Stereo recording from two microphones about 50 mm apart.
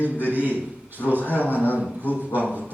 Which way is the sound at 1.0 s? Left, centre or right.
Left.